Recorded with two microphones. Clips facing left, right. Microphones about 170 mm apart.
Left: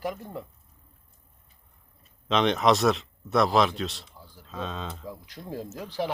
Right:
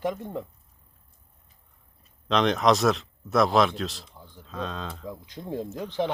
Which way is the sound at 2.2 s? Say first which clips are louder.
Right 1 dB; centre (ahead or behind).